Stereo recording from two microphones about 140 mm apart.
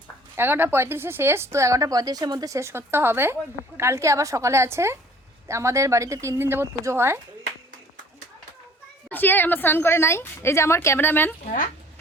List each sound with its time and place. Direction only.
0.3 s speech: 15° right (ahead or behind)
9.0 s a woman's voice: 15° left (ahead or behind)
11.4 s a woman's voice: 75° left (ahead or behind)